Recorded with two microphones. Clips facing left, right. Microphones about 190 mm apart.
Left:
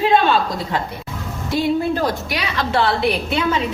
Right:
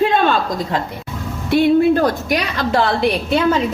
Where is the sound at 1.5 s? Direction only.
65° right (ahead or behind).